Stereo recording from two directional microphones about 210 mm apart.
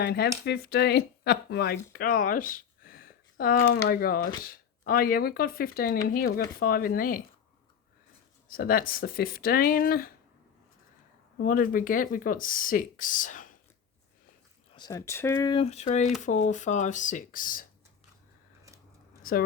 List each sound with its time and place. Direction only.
0.0 s speech: 50° left (ahead or behind)
8.4 s speech: 45° left (ahead or behind)
11.4 s speech: 40° left (ahead or behind)
14.8 s speech: 15° left (ahead or behind); by 17.7 s 40° left (ahead or behind)